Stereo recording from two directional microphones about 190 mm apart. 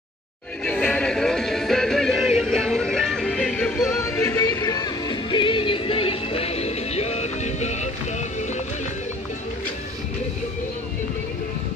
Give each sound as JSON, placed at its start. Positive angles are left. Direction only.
{"t": 0.7, "sound": "music", "side_deg": 5}
{"t": 4.0, "sound": "music", "side_deg": 15}